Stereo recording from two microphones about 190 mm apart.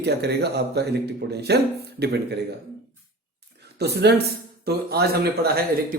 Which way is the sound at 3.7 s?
60° right (ahead or behind).